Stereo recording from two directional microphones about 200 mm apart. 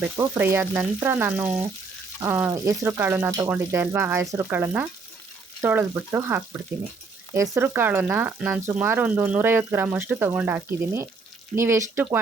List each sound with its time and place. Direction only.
0.0 s speech: 10° right (ahead or behind)